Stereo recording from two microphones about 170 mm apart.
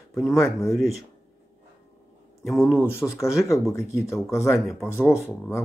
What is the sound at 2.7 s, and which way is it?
Speech, 15° left (ahead or behind).